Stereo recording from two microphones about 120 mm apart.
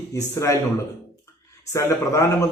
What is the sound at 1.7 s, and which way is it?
Speech, 25° left (ahead or behind).